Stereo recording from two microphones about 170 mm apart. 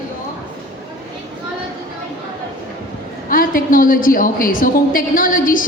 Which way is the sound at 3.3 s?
55° left (ahead or behind).